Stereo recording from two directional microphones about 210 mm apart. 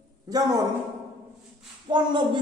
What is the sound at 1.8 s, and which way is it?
Speech, 20° right (ahead or behind).